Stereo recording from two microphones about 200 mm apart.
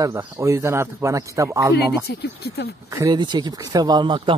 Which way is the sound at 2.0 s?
55° left (ahead or behind).